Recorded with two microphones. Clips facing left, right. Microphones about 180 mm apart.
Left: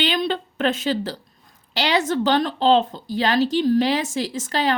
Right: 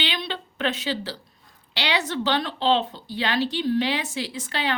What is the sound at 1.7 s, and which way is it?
A woman's voice, 45° left (ahead or behind).